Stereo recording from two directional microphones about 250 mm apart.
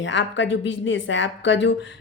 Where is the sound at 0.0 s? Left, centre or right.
Left.